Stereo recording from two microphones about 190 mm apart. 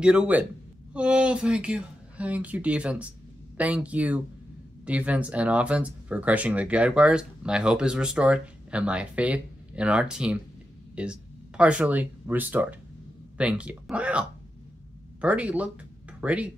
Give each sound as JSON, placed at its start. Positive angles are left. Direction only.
{"t": 0.0, "sound": "a man's voice", "side_deg": -5}